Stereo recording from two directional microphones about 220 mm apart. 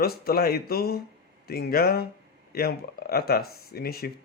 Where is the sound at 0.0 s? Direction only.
45° left (ahead or behind).